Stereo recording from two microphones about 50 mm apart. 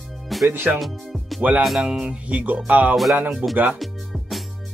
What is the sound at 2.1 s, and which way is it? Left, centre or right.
Music, right.